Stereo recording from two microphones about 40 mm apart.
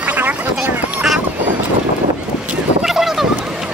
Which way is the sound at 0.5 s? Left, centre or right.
Centre.